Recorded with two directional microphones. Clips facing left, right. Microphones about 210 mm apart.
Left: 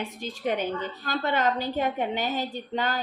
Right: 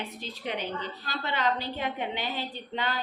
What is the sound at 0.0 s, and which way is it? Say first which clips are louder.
A woman's voice: left 6 dB; 45° left (ahead or behind).